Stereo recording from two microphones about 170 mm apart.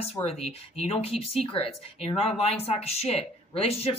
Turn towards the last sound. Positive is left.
turn(degrees=35)  # may be behind; listen again after turning